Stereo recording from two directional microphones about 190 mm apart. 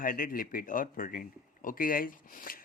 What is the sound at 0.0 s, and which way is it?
Speech, 50° left (ahead or behind).